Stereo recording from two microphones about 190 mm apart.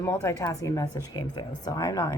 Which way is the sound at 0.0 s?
15° left (ahead or behind).